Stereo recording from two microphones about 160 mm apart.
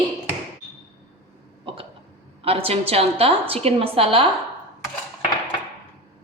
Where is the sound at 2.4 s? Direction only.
35° right (ahead or behind).